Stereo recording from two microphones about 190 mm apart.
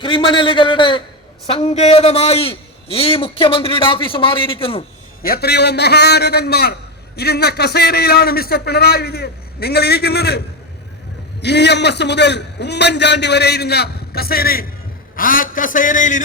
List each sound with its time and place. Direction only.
0.0 s a man's voice: 25° left (ahead or behind)
5.2 s a man's voice: 55° left (ahead or behind)